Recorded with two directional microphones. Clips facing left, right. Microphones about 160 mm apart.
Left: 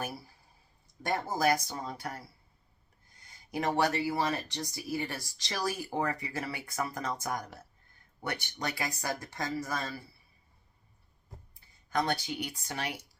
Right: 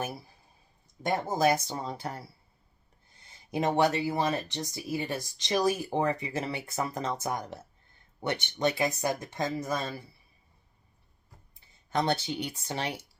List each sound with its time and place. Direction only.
1.0 s speech: 20° right (ahead or behind)
11.9 s speech: 25° right (ahead or behind)